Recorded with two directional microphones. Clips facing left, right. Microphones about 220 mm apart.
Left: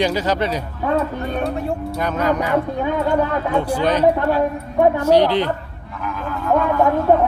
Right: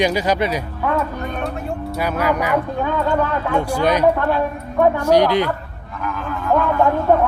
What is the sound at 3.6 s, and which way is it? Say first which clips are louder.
Speech: even; 10° right (ahead or behind).